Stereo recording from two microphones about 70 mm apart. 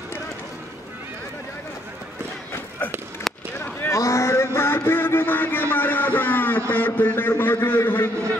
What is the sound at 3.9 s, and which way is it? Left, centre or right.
Vehicle, left.